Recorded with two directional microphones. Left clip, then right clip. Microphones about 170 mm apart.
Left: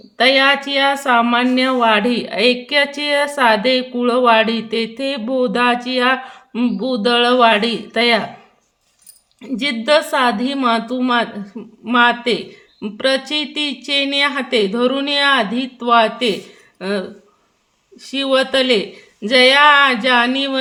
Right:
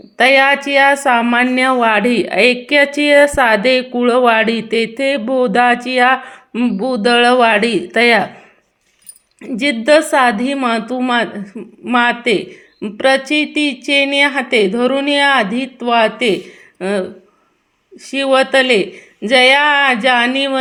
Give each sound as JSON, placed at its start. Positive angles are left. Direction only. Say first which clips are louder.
{"t": 0.2, "sound": "a woman's voice", "louder": "right 3 dB", "side_deg": -25}
{"t": 9.4, "sound": "a woman's voice", "louder": "right 4 dB", "side_deg": -20}
{"t": 11.6, "sound": "speech", "louder": "right 3 dB", "side_deg": -5}
{"t": 11.9, "sound": "speech", "louder": "right 1 dB", "side_deg": -20}
{"t": 18.1, "sound": "speech", "louder": "right 4 dB", "side_deg": -15}